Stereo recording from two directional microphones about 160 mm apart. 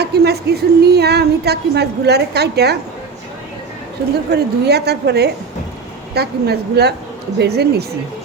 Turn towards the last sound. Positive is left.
turn(degrees=-90)